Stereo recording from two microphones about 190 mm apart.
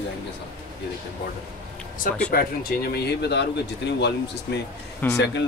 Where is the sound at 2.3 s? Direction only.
55° left (ahead or behind).